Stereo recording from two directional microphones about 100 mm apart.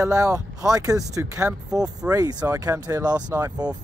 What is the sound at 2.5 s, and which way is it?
Speech, 35° right (ahead or behind).